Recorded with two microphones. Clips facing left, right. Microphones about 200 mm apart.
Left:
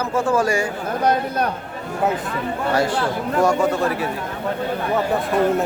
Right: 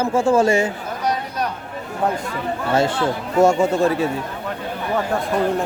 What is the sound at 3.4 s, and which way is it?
Speech, 25° right (ahead or behind).